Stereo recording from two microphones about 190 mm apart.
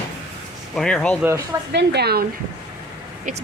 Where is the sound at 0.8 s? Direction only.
5° left (ahead or behind).